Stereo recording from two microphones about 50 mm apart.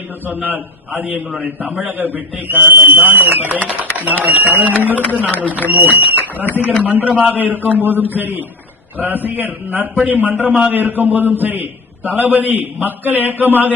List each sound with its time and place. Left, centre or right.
0.3 s a man's voice: right
3.8 s a sound: right
4.2 s a man's voice: right